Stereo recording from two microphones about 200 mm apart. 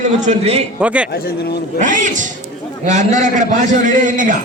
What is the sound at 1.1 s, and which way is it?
Speech, 50° left (ahead or behind).